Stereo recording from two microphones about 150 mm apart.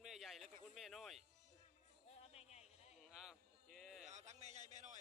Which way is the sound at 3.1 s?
Centre (ahead or behind).